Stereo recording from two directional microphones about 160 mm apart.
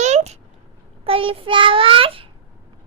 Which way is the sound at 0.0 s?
45° right (ahead or behind).